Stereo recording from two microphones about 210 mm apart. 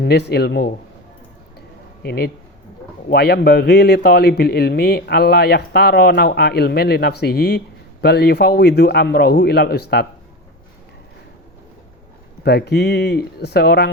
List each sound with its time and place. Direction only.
0.0 s speech: 55° left (ahead or behind)
2.0 s speech: 50° left (ahead or behind)
12.4 s speech: 50° left (ahead or behind)